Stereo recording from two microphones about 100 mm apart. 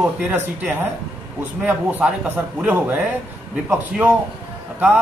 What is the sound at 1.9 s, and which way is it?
A man's voice, 15° right (ahead or behind).